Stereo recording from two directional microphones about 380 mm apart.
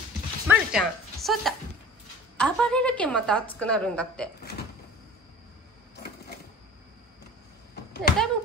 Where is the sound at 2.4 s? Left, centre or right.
Centre.